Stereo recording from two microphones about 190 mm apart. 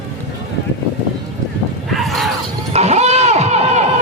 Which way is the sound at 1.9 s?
Centre (ahead or behind).